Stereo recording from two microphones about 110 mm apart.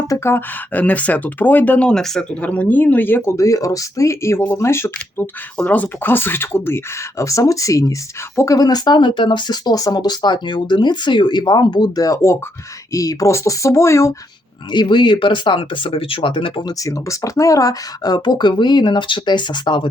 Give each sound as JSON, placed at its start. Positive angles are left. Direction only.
{"t": 0.1, "sound": "speech", "side_deg": 25}
{"t": 5.5, "sound": "speech", "side_deg": 15}
{"t": 14.7, "sound": "speech", "side_deg": 45}
{"t": 16.8, "sound": "speech", "side_deg": 30}